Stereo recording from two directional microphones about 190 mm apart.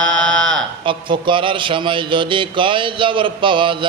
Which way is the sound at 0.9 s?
25° right (ahead or behind).